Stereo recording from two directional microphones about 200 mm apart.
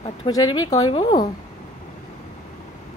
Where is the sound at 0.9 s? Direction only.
20° left (ahead or behind).